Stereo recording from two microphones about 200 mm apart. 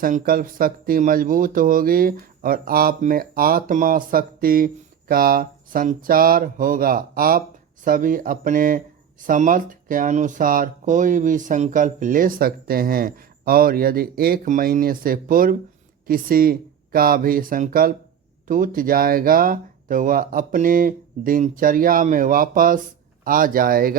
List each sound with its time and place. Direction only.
0.0 s speech: 45° right (ahead or behind)